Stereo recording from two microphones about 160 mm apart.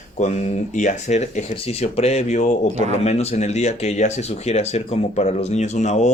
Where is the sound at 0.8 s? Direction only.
50° left (ahead or behind).